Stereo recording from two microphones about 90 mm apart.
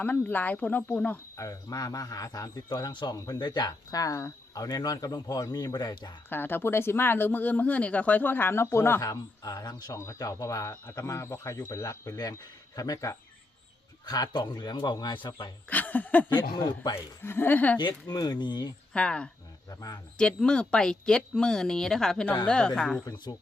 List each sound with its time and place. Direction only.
0.0 s speech: 20° left (ahead or behind)
1.4 s speech: 40° left (ahead or behind)
3.2 s speech: 40° left (ahead or behind)
3.4 s speech: 55° left (ahead or behind)
6.3 s speech: 25° left (ahead or behind)
9.0 s speech: 40° left (ahead or behind)
14.1 s speech: 50° left (ahead or behind)
15.7 s speech: 20° left (ahead or behind)
16.6 s speech: 50° left (ahead or behind)
16.9 s speech: 25° left (ahead or behind)
17.7 s speech: 50° left (ahead or behind)
18.9 s speech: 10° left (ahead or behind)